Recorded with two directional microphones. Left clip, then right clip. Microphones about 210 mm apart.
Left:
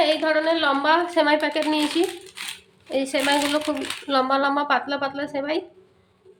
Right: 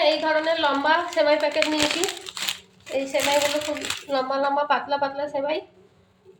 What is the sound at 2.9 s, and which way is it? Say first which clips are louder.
A woman's voice: left 1 dB; 50° left (ahead or behind).